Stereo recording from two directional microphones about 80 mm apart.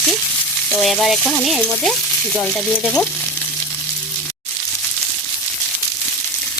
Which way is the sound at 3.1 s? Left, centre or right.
Left.